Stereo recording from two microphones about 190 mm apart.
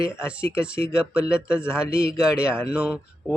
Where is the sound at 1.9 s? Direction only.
55° left (ahead or behind).